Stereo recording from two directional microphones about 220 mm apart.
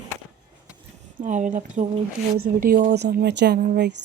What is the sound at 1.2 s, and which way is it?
Speech, 35° right (ahead or behind).